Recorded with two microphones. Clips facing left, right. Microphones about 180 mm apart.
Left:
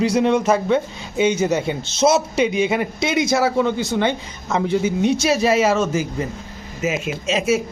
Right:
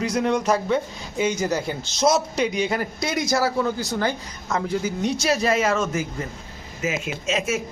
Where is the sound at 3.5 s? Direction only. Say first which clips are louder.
Left 5 dB; 25° left (ahead or behind).